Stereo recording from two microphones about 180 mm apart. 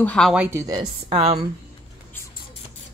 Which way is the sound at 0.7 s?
30° right (ahead or behind).